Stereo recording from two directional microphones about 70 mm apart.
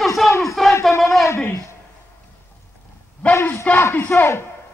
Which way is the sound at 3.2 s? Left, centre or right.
Left.